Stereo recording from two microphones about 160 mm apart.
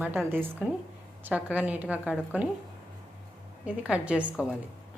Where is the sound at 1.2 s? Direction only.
10° right (ahead or behind).